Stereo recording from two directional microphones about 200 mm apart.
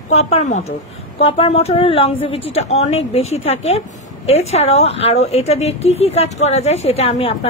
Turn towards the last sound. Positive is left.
turn(degrees=30)  # may be behind; listen again after turning